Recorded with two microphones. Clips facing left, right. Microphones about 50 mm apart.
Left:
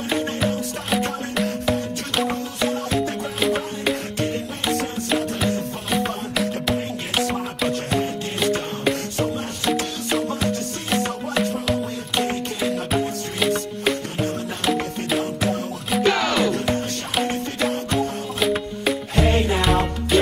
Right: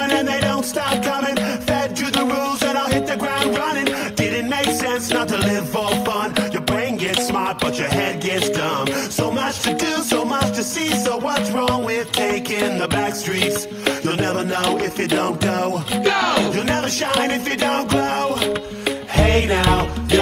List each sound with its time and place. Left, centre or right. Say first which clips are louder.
1.4 s music: right 3 dB; right
5.9 s music: right 1 dB; centre
7.2 s music: right 4 dB; right
9.8 s music: right 4 dB; right
11.7 s music: right 4 dB; right
13.4 s music: left 2 dB; centre
17.2 s music: left 1 dB; right
18.4 s music: even; centre
19.1 s music: right 4 dB; right